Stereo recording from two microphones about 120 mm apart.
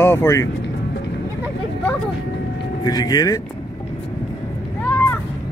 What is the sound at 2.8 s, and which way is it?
Speech, 35° left (ahead or behind).